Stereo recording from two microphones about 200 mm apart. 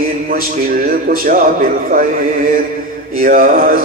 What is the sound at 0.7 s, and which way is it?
Music, 45° right (ahead or behind).